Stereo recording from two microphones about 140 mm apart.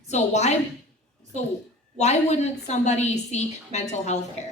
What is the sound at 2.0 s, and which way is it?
Speech, 55° left (ahead or behind).